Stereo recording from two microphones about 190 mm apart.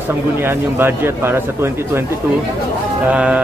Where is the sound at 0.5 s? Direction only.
10° right (ahead or behind).